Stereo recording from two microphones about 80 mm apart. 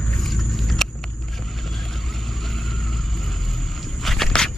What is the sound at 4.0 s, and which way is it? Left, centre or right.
Walk, centre.